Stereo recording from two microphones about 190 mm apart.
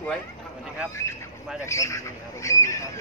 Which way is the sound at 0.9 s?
15° left (ahead or behind).